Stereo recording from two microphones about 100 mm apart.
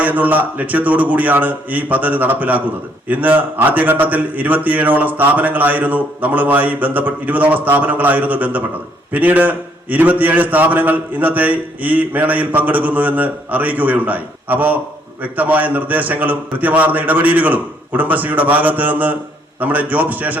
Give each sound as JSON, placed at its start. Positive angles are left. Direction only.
{"t": 0.0, "sound": "a man's voice", "side_deg": -15}